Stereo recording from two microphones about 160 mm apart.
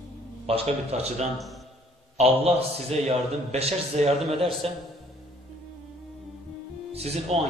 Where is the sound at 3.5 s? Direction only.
40° right (ahead or behind).